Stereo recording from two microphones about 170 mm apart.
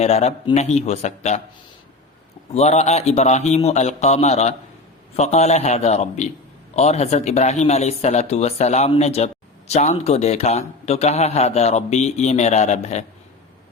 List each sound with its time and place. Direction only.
0.0 s speech: 40° left (ahead or behind)
2.5 s speech: 40° left (ahead or behind)